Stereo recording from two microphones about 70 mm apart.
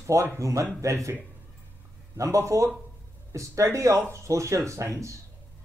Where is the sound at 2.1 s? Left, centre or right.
Right.